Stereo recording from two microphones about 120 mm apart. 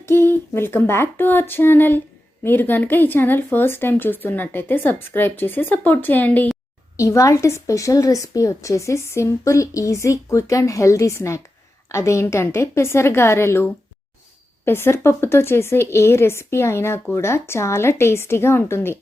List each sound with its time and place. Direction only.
0.0 s speech: 20° left (ahead or behind)
6.9 s a woman's voice: 25° left (ahead or behind)